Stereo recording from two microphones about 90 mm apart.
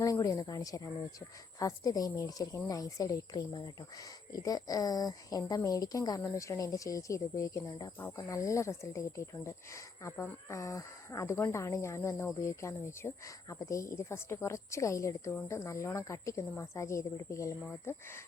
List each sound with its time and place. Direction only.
0.0 s speech: 40° left (ahead or behind)
10.6 s speech: 35° left (ahead or behind)